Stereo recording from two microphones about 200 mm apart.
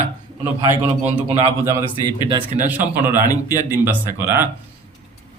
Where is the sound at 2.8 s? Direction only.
20° left (ahead or behind).